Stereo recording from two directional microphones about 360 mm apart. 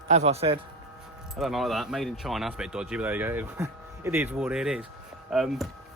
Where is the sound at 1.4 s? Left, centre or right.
Centre.